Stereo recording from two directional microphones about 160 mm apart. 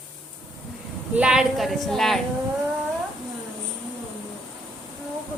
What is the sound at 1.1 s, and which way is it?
A woman's voice, 5° right (ahead or behind).